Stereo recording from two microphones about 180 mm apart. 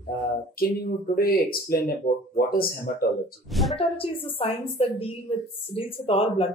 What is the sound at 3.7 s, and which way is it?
Speech, 30° left (ahead or behind).